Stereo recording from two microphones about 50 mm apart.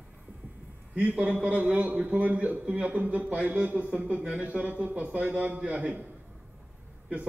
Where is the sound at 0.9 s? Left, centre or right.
Right.